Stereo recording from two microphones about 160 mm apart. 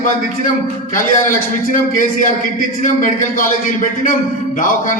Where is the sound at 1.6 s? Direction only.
55° left (ahead or behind).